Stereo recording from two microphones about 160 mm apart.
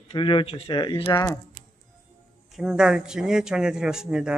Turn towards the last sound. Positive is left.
turn(degrees=-5)  # may be behind; listen again after turning